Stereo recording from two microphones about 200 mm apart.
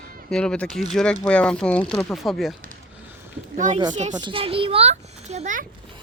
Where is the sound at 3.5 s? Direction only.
40° right (ahead or behind).